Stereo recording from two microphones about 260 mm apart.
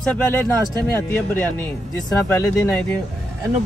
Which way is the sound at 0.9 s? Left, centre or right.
Centre.